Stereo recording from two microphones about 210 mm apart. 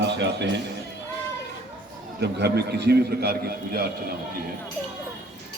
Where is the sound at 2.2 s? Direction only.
50° right (ahead or behind).